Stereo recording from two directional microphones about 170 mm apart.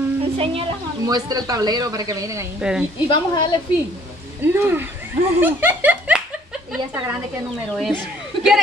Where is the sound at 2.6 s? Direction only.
5° right (ahead or behind).